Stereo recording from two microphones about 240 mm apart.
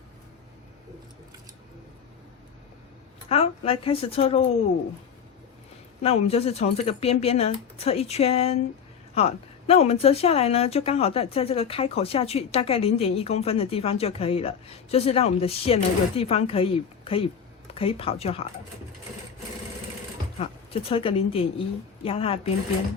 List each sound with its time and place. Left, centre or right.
3.2 s a woman's voice: left
6.0 s a woman's voice: left
20.4 s a woman's voice: left